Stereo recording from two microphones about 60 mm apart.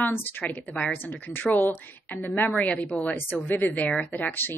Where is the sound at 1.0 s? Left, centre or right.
Left.